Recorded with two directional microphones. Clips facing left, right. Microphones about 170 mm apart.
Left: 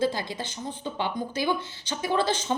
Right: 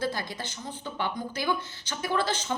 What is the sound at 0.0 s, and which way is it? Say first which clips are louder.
A woman's voice: left 4 dB; 20° left (ahead or behind).